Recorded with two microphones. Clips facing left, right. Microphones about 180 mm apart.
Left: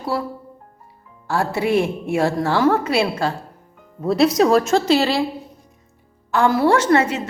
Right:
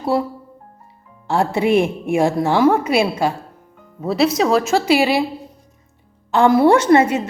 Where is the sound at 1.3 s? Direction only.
20° right (ahead or behind).